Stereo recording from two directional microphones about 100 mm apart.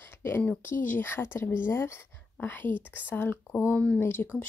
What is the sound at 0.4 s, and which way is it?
A woman's voice, 20° left (ahead or behind).